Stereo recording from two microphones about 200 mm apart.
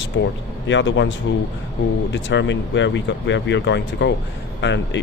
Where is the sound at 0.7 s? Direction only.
65° left (ahead or behind).